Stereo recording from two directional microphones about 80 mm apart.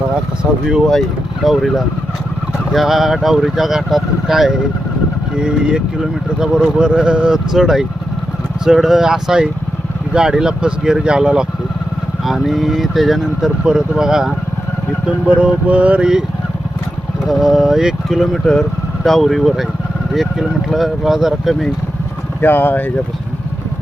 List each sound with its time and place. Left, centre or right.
0.9 s speech: centre
17.2 s speech: centre
22.4 s speech: left